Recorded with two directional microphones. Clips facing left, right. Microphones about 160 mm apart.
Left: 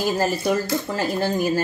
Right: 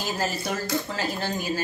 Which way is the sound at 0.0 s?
50° left (ahead or behind).